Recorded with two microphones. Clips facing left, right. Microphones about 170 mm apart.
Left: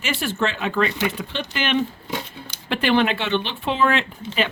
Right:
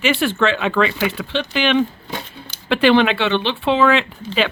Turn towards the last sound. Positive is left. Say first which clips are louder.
# right 4 dB
turn(degrees=-90)